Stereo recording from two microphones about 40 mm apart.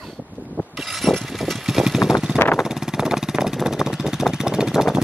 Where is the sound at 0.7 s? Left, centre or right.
Centre.